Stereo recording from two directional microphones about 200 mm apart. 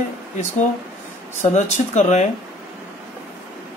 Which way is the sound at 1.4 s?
35° left (ahead or behind).